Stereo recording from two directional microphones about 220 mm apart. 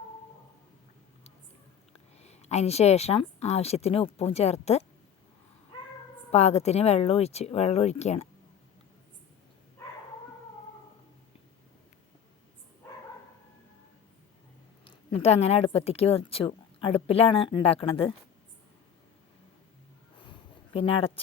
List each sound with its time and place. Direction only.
2.1 s a woman's voice: 30° left (ahead or behind)
6.3 s a woman's voice: 30° left (ahead or behind)
14.8 s a woman's voice: 30° left (ahead or behind)
20.7 s a woman's voice: 25° left (ahead or behind)